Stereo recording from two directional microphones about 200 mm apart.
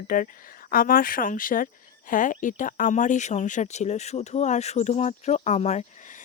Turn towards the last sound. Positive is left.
turn(degrees=35)  # may be behind; listen again after turning